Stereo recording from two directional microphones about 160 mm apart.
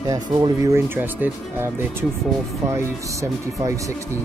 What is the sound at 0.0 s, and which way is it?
Speech, 25° right (ahead or behind).